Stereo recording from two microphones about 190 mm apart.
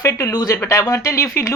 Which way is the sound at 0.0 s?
15° left (ahead or behind).